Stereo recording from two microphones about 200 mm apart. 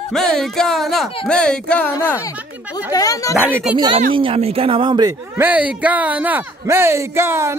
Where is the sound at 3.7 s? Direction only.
25° right (ahead or behind).